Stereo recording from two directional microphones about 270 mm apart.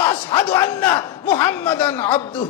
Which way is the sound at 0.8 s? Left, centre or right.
Centre.